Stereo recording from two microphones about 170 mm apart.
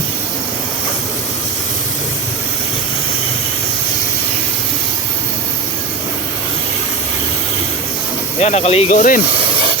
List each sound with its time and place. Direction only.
8.4 s speech: 40° left (ahead or behind)